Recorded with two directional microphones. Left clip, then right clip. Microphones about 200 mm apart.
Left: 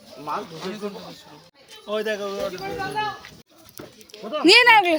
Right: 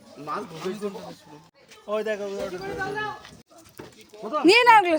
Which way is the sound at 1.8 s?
55° left (ahead or behind).